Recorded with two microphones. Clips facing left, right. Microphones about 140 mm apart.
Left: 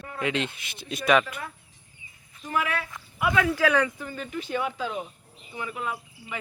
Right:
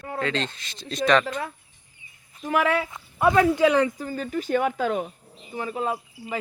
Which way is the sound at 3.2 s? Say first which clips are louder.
Right 6 dB; 40° right (ahead or behind).